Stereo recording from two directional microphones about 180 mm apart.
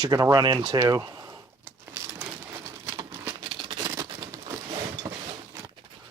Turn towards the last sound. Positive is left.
turn(degrees=-15)  # may be behind; listen again after turning